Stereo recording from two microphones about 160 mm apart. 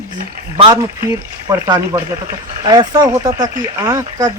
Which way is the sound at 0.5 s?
30° right (ahead or behind).